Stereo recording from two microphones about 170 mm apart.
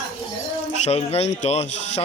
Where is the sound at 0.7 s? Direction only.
40° left (ahead or behind).